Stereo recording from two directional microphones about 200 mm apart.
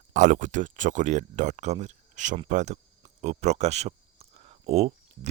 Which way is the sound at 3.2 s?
35° right (ahead or behind).